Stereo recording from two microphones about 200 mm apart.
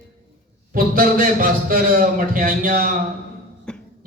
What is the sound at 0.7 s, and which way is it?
A man's voice, 45° right (ahead or behind).